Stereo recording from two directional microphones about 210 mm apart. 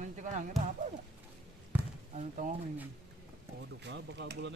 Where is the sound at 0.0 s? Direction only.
35° right (ahead or behind).